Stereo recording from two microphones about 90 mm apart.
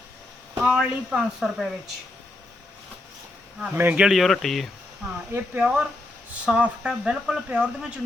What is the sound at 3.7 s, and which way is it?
Speech, 20° right (ahead or behind).